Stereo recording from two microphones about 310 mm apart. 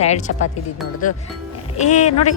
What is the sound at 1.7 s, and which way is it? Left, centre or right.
Speech, left.